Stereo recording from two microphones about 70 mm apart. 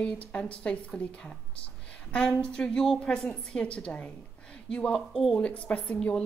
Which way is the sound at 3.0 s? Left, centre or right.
Centre.